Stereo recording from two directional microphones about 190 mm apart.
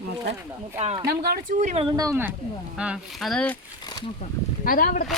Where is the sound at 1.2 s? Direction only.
55° right (ahead or behind).